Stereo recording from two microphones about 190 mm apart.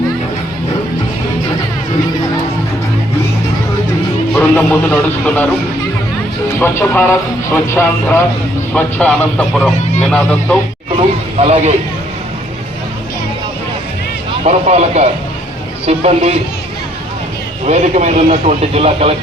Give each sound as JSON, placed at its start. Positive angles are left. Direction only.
{"t": 4.4, "sound": "speech", "side_deg": 10}
{"t": 6.6, "sound": "speech", "side_deg": 10}
{"t": 11.3, "sound": "a man's voice", "side_deg": -30}
{"t": 14.4, "sound": "a man's voice", "side_deg": -35}
{"t": 17.7, "sound": "a man's voice", "side_deg": -35}